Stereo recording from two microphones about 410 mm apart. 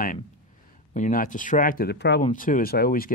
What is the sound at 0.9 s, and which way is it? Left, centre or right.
Speech, centre.